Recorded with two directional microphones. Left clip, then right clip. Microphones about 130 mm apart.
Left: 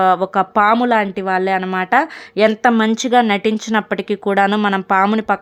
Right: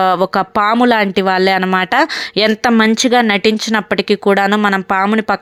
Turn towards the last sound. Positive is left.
turn(degrees=-15)  # may be behind; listen again after turning